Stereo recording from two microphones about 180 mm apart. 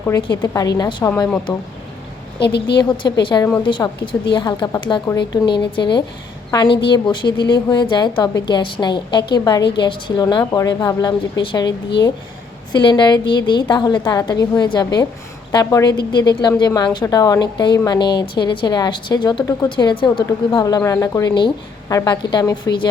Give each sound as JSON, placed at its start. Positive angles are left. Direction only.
{"t": 0.1, "sound": "a woman's voice", "side_deg": 20}
{"t": 2.4, "sound": "a woman's voice", "side_deg": 70}
{"t": 3.0, "sound": "a woman's voice", "side_deg": 25}
{"t": 12.7, "sound": "a woman's voice", "side_deg": 25}